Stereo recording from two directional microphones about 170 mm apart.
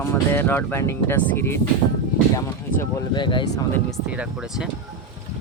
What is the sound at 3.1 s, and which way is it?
Speech, 25° left (ahead or behind).